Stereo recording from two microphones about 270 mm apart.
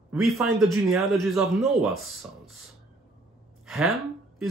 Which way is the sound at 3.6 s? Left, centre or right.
Centre.